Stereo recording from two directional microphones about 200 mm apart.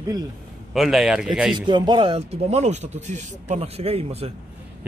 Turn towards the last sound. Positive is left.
turn(degrees=-30)  # may be behind; listen again after turning